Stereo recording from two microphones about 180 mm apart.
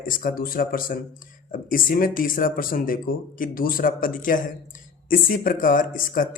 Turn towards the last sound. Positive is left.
turn(degrees=50)  # may be behind; listen again after turning